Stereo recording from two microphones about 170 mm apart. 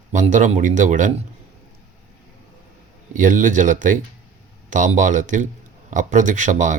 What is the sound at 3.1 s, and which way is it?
Speech, 50° right (ahead or behind).